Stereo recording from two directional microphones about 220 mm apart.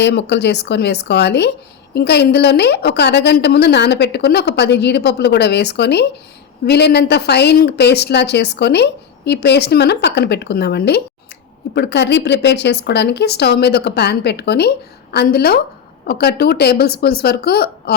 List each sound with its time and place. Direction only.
0.0 s a woman's voice: 50° left (ahead or behind)